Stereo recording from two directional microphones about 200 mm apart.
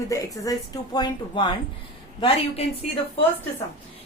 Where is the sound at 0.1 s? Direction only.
15° left (ahead or behind).